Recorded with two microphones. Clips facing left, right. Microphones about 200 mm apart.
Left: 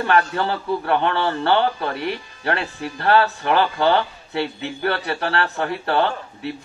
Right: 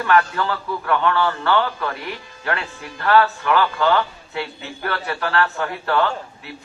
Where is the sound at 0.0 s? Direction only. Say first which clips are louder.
Even; 30° left (ahead or behind).